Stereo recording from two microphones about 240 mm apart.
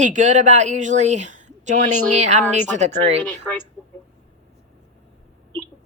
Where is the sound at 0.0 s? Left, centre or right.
Right.